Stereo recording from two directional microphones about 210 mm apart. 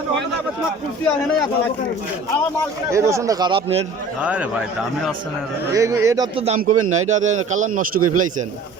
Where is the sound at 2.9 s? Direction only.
15° right (ahead or behind).